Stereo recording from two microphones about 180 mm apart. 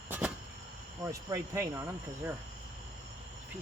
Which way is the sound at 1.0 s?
15° right (ahead or behind).